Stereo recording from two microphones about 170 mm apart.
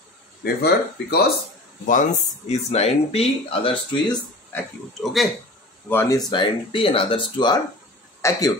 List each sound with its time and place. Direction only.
0.4 s speech: 70° left (ahead or behind)
1.9 s speech: 45° left (ahead or behind)
5.0 s speech: centre (ahead or behind)
5.9 s a man's voice: 15° left (ahead or behind)